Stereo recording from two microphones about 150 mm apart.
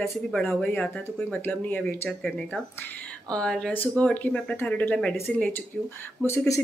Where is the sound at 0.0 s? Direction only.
5° left (ahead or behind).